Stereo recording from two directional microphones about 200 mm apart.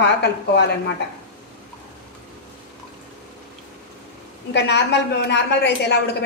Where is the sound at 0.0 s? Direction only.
60° left (ahead or behind).